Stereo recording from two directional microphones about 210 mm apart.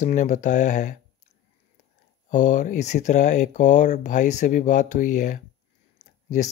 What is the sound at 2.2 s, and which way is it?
Speech, 35° left (ahead or behind).